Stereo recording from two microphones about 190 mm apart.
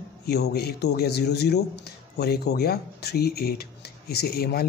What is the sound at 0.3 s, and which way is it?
A man's voice, 60° left (ahead or behind).